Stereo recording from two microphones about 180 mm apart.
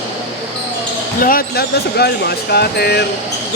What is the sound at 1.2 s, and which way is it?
Speech, 55° left (ahead or behind).